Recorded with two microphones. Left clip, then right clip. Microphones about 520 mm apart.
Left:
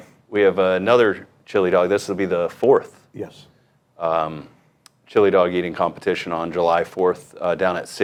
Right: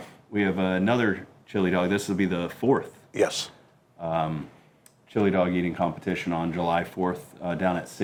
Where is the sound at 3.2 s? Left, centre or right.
Right.